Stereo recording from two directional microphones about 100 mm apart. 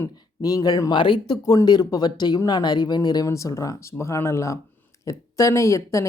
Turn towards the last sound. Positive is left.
turn(degrees=30)  # may be behind; listen again after turning